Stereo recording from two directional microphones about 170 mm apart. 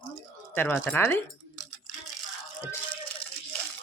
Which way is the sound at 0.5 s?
10° left (ahead or behind).